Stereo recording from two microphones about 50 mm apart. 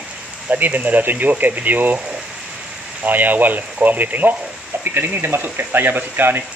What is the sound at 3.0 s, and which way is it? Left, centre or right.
Speech, right.